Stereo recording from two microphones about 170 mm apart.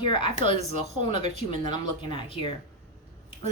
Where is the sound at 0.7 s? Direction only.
45° right (ahead or behind).